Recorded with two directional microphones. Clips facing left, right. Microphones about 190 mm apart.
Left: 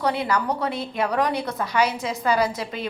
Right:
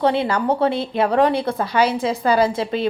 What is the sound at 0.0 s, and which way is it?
A woman's voice, 25° right (ahead or behind).